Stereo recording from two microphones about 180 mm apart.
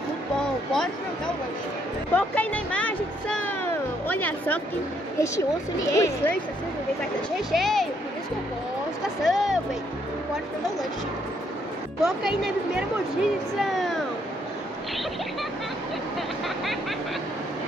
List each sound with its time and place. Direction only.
0.4 s a sound: 5° left (ahead or behind)
2.1 s a woman's voice: 10° left (ahead or behind)
7.5 s a woman's voice: centre (ahead or behind)
9.2 s a woman's voice: centre (ahead or behind)
12.0 s a woman's voice: 5° right (ahead or behind)